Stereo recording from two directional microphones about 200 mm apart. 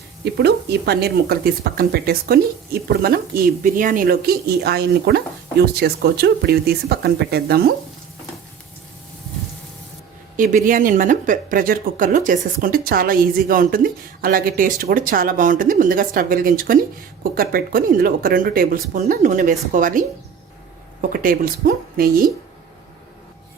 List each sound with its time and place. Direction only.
0.3 s speech: 55° right (ahead or behind)
10.3 s speech: 40° right (ahead or behind)
21.1 s speech: 45° right (ahead or behind)